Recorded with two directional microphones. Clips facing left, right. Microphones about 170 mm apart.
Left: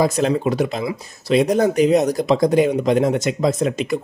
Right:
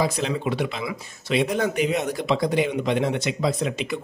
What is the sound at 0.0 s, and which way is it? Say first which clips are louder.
A man's voice: left 6 dB; 45° left (ahead or behind).